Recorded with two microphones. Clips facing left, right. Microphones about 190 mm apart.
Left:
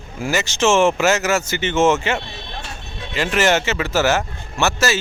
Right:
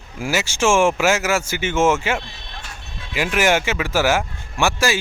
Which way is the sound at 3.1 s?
10° right (ahead or behind).